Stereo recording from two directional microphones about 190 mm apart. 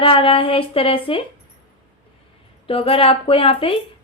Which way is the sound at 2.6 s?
30° left (ahead or behind).